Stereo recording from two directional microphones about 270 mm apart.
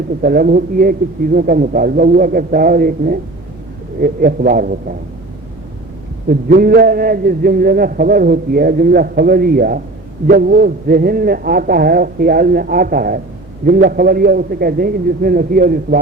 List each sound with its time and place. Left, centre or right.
0.2 s a man's voice: right
6.2 s a man's voice: right